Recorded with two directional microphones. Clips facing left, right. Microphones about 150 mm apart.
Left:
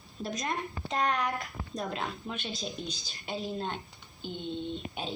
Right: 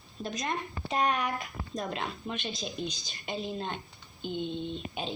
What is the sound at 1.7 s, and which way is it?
Speech, centre (ahead or behind).